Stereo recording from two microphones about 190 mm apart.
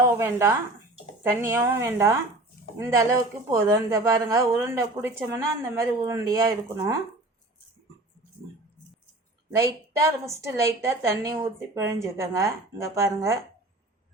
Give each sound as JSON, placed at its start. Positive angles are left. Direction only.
{"t": 0.0, "sound": "speech", "side_deg": -15}
{"t": 9.6, "sound": "speech", "side_deg": -15}